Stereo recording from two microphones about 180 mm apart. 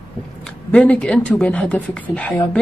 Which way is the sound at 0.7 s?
5° left (ahead or behind).